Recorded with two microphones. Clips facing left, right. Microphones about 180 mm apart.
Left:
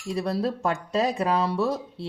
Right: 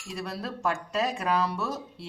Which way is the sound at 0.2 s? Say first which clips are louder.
Left 7 dB; 35° left (ahead or behind).